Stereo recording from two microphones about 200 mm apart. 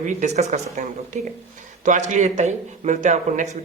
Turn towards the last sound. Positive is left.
turn(degrees=-35)  # may be behind; listen again after turning